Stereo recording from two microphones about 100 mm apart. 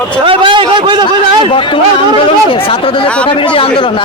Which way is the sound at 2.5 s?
65° left (ahead or behind).